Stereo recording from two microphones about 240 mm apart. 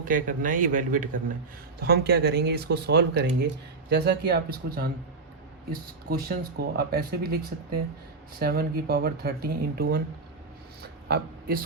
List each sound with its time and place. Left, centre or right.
0.0 s speech: right
8.4 s speech: right
11.1 s speech: right